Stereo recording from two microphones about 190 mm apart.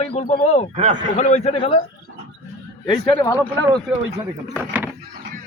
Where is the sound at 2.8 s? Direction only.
25° left (ahead or behind).